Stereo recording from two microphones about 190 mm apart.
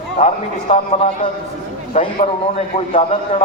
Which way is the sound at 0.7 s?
35° left (ahead or behind).